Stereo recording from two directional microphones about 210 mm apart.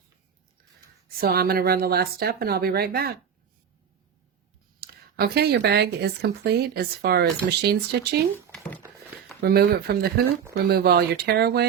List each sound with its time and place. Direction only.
1.0 s speech: 45° right (ahead or behind)
4.8 s speech: 45° right (ahead or behind)
9.4 s speech: 45° right (ahead or behind)